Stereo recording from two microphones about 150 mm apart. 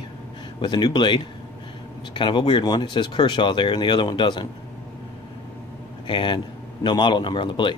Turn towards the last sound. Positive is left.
turn(degrees=30)  # may be behind; listen again after turning